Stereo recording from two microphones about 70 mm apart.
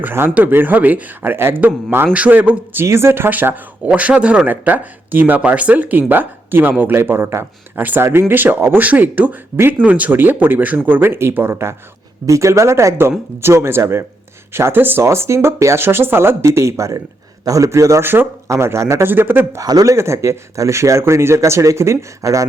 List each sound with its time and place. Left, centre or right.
0.0 s speech: right
2.8 s speech: right
12.2 s speech: right
15.0 s speech: right
18.0 s speech: right
18.4 s speech: right
19.0 s speech: right
19.5 s speech: right
20.0 s speech: right